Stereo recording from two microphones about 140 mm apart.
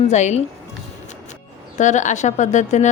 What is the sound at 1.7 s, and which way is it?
A woman's voice, 60° left (ahead or behind).